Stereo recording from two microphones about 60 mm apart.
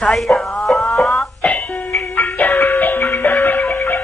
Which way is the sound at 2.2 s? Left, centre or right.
Left.